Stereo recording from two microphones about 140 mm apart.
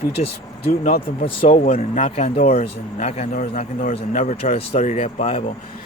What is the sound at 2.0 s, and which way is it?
Speech, 45° left (ahead or behind).